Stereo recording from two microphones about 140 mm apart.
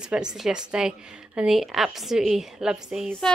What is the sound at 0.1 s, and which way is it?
A woman's voice, 5° right (ahead or behind).